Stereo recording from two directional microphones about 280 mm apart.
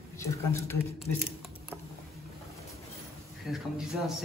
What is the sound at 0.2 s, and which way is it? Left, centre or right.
Speech, centre.